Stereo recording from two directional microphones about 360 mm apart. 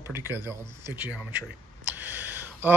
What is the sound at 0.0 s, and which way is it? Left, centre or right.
Speech, centre.